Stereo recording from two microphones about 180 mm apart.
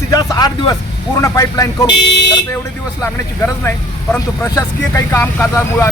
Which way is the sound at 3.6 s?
15° left (ahead or behind).